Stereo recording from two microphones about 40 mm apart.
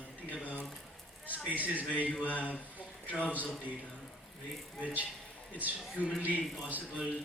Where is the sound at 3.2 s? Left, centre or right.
Left.